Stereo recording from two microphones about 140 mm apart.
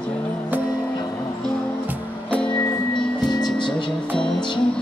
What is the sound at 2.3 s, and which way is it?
Music, 10° left (ahead or behind).